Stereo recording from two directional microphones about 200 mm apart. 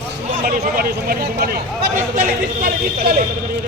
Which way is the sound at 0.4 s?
45° right (ahead or behind).